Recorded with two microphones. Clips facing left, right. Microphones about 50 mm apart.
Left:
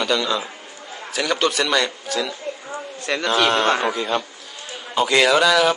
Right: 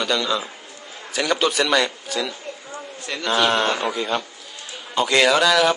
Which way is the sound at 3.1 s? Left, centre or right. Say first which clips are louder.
Left 7 dB; left.